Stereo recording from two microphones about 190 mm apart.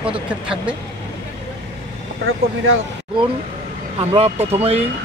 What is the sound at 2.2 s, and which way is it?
Speech, 90° right.